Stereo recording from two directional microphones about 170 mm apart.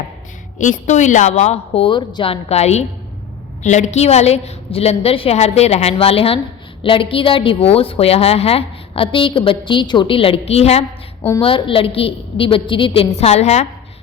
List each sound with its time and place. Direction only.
0.6 s a woman's voice: 45° left (ahead or behind)